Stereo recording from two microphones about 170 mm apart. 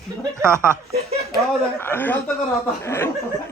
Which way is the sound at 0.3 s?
15° right (ahead or behind).